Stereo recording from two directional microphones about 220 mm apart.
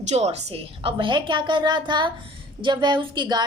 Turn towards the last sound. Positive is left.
turn(degrees=-20)  # may be behind; listen again after turning